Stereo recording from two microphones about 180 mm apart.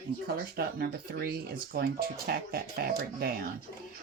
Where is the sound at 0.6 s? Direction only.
55° right (ahead or behind).